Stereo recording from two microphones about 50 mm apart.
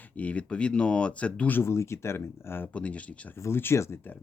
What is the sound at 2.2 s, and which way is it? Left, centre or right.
Speech, left.